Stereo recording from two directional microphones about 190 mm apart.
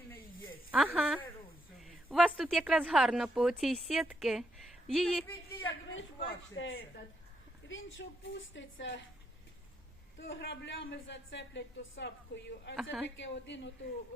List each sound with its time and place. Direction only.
0.7 s speech: 5° right (ahead or behind)
5.6 s a sound: 90° left
6.2 s a man's voice: 65° left (ahead or behind)
10.2 s a man's voice: 70° left (ahead or behind)
12.7 s speech: 5° right (ahead or behind)
13.1 s a man's voice: 70° left (ahead or behind)